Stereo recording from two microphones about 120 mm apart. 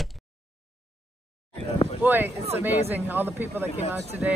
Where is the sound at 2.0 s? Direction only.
15° right (ahead or behind).